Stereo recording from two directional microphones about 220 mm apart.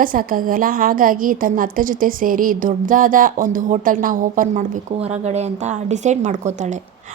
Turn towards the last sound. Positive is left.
turn(degrees=-30)  # may be behind; listen again after turning